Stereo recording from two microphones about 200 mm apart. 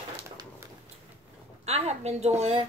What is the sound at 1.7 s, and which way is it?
Speech, 30° right (ahead or behind).